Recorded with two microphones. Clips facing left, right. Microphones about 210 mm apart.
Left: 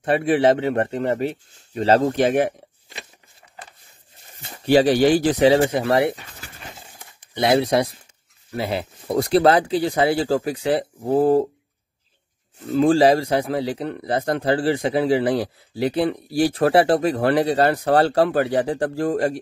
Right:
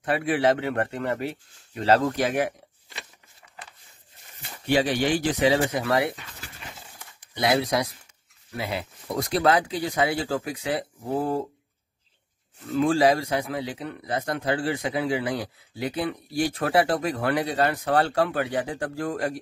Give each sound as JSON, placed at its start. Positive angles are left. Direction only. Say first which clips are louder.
{"t": 0.0, "sound": "a man's voice", "louder": "left 5 dB", "side_deg": 25}
{"t": 3.4, "sound": "a sound", "louder": "even", "side_deg": 35}
{"t": 4.6, "sound": "a man's voice", "louder": "left 8 dB", "side_deg": 35}
{"t": 7.0, "sound": "a sound", "louder": "left 5 dB", "side_deg": 25}
{"t": 8.5, "sound": "a man's voice", "louder": "left 6 dB", "side_deg": 30}
{"t": 12.6, "sound": "a man's voice", "louder": "left 5 dB", "side_deg": 30}